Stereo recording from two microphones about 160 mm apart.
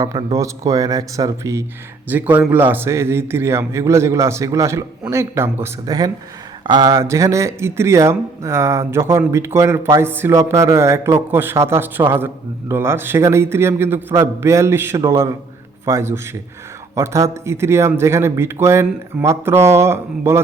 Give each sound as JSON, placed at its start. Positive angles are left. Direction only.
{"t": 0.0, "sound": "speech", "side_deg": -20}